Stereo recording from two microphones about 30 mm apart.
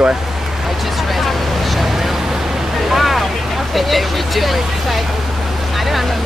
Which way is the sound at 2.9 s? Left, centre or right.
Centre.